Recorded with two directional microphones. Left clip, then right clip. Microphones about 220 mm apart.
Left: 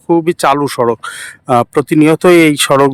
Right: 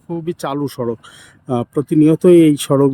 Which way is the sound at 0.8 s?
35° left (ahead or behind).